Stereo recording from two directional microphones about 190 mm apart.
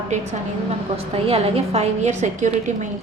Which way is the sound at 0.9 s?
30° right (ahead or behind).